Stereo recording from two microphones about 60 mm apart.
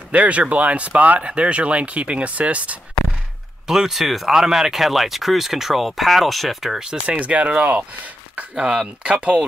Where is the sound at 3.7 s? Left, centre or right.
Centre.